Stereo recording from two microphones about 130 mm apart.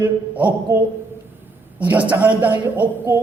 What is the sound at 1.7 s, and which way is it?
A man's voice, 10° right (ahead or behind).